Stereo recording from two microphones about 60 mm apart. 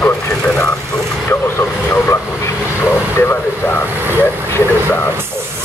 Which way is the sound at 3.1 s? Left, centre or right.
Left.